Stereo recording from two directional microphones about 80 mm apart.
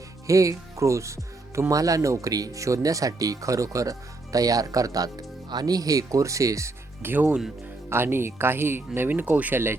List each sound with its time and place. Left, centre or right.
0.3 s speech: right
7.0 s speech: right